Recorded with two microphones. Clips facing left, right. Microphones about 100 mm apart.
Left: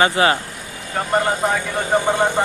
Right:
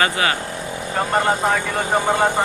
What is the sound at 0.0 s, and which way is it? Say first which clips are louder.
Speech: left 4 dB; 30° left (ahead or behind).